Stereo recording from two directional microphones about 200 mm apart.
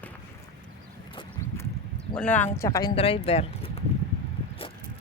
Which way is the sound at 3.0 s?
30° left (ahead or behind).